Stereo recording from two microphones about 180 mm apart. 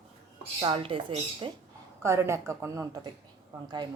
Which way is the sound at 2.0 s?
15° right (ahead or behind).